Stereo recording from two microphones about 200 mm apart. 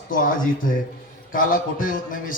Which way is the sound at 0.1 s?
45° left (ahead or behind).